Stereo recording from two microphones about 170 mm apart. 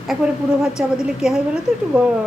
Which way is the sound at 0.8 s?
5° right (ahead or behind).